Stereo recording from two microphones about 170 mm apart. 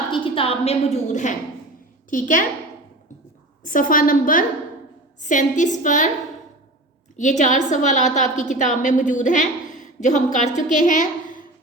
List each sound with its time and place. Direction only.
0.1 s a woman's voice: 30° left (ahead or behind); by 2.5 s 50° left (ahead or behind)
3.6 s a woman's voice: 50° left (ahead or behind)
7.2 s a woman's voice: 45° left (ahead or behind)